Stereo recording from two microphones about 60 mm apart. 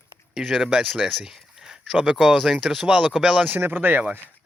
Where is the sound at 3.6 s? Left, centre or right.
Right.